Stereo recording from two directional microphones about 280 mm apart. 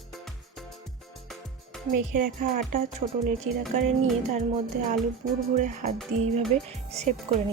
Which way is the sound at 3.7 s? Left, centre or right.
Right.